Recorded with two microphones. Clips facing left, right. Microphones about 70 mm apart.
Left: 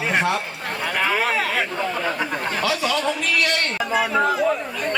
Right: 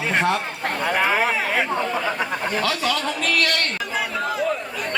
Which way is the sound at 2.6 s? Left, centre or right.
Centre.